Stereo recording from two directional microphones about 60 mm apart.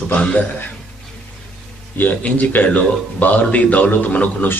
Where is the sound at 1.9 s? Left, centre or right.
Left.